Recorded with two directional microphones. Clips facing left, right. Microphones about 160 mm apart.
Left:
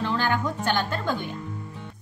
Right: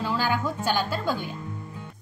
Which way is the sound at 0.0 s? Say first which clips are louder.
Left 1 dB; 10° right (ahead or behind).